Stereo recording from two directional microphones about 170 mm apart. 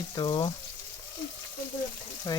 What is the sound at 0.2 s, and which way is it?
Speech, 25° left (ahead or behind).